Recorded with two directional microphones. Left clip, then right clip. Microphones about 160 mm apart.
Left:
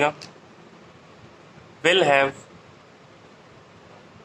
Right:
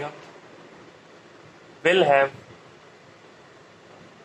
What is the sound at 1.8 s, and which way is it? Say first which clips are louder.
Speech: even; 40° left (ahead or behind).